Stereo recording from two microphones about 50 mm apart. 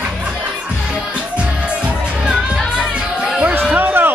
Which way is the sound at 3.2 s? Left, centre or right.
Centre.